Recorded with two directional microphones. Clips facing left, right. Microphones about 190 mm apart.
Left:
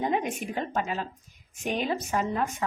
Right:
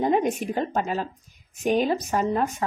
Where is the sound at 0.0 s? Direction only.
40° right (ahead or behind).